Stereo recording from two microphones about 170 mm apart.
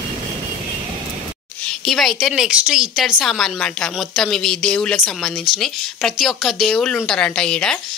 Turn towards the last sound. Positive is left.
turn(degrees=5)  # may be behind; listen again after turning